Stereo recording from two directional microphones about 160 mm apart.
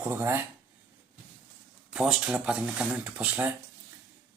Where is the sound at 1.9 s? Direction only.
5° right (ahead or behind).